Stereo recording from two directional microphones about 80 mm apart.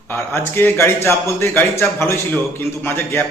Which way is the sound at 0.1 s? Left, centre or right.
Left.